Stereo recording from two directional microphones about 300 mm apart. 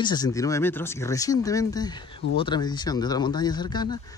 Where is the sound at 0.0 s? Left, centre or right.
Centre.